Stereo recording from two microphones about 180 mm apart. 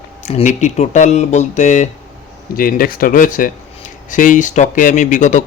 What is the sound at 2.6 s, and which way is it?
Speech, 55° left (ahead or behind).